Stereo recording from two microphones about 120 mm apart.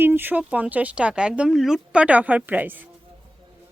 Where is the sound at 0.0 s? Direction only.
15° right (ahead or behind).